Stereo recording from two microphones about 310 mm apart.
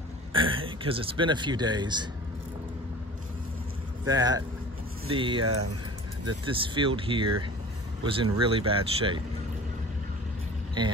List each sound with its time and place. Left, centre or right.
0.3 s speech: centre
4.1 s speech: centre
5.4 s speech: right
6.5 s speech: centre